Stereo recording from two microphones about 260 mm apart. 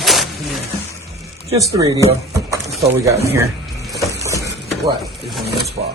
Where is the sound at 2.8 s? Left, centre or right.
Centre.